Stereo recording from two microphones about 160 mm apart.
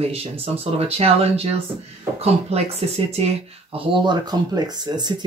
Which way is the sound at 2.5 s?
40° right (ahead or behind).